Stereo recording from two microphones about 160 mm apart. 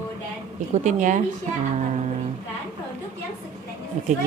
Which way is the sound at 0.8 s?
50° right (ahead or behind).